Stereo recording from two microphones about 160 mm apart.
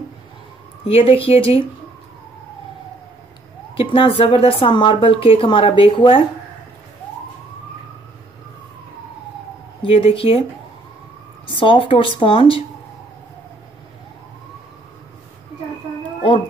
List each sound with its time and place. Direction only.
0.8 s speech: 35° left (ahead or behind)
3.8 s speech: 30° left (ahead or behind)
9.8 s speech: 35° left (ahead or behind)
11.4 s speech: 30° left (ahead or behind)
16.2 s a sound: 30° left (ahead or behind)